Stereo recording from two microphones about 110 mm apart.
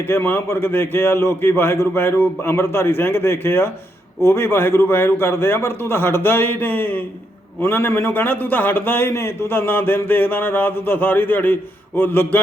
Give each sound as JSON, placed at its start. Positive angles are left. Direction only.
{"t": 0.0, "sound": "a man's voice", "side_deg": 20}